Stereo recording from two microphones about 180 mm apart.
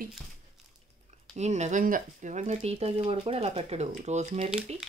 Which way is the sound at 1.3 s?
40° right (ahead or behind).